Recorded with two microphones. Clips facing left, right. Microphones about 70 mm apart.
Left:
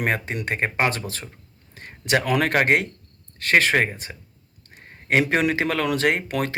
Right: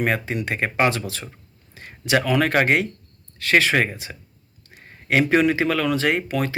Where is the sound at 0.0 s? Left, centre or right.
Left.